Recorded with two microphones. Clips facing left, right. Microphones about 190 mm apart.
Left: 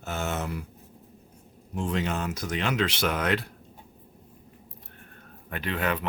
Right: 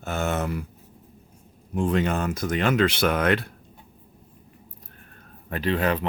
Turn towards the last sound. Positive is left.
turn(degrees=-35)  # may be behind; listen again after turning